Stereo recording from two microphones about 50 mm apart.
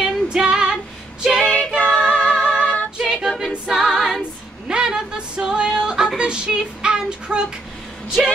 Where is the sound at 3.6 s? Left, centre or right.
Centre.